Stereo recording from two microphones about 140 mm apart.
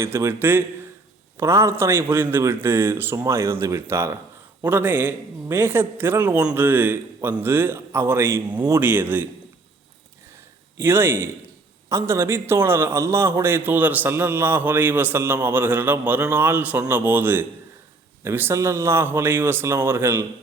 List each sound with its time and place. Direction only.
0.0 s a man's voice: 15° right (ahead or behind)
10.8 s a man's voice: 15° right (ahead or behind)